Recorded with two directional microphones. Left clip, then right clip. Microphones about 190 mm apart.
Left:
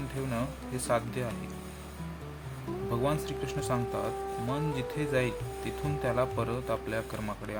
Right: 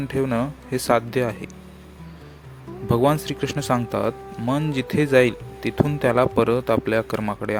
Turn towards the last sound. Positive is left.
turn(degrees=-55)  # may be behind; listen again after turning